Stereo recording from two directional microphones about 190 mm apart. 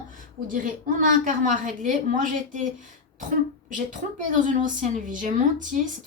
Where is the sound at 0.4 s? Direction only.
45° right (ahead or behind).